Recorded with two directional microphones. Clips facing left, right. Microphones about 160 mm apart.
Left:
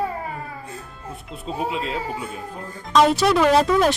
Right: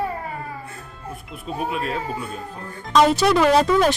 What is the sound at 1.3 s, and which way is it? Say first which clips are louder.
Speech: left 1 dB; 25° left (ahead or behind).